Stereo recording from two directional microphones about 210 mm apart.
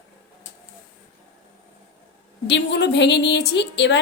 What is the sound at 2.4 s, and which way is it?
A woman's voice, 55° left (ahead or behind).